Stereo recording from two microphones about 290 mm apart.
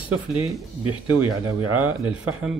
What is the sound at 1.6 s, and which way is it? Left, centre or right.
Speech, right.